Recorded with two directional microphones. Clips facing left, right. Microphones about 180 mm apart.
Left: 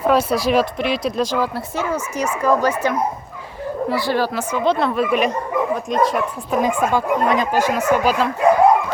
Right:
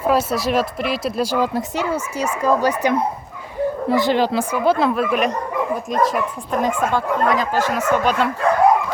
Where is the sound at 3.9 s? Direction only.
20° right (ahead or behind); by 6.6 s centre (ahead or behind).